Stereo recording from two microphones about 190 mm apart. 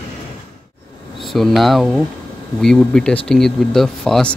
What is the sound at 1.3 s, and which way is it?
Speech, centre (ahead or behind).